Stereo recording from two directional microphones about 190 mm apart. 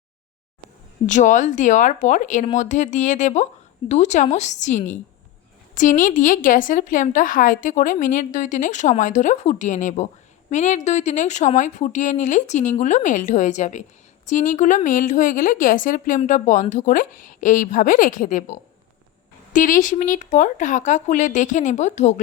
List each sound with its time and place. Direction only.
1.0 s a woman's voice: 40° left (ahead or behind)
19.5 s a woman's voice: 45° left (ahead or behind)